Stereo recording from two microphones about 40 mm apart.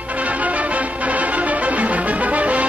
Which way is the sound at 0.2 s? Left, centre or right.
Right.